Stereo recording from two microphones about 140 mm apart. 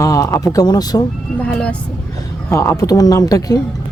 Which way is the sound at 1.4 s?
10° left (ahead or behind).